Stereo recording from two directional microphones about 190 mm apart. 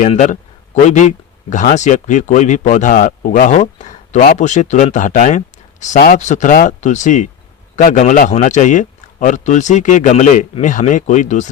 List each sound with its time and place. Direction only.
0.0 s speech: 40° left (ahead or behind)